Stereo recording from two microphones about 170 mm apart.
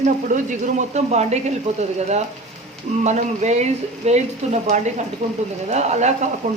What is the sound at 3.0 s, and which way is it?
A woman's voice, 45° right (ahead or behind).